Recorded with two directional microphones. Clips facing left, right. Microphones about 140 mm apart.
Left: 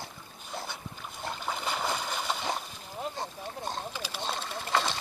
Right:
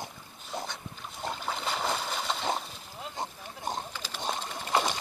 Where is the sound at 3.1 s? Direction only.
20° right (ahead or behind).